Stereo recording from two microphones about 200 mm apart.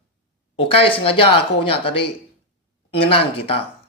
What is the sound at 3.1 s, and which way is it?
Speech, 25° left (ahead or behind).